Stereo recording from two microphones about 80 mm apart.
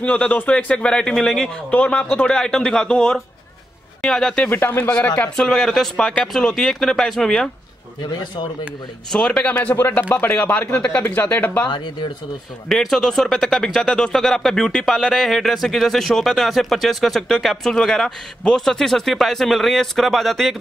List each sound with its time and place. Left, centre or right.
0.0 s speech: centre
4.5 s speech: left; by 7.4 s centre
9.1 s speech: centre
9.8 s speech: left
11.6 s speech: left
12.6 s speech: centre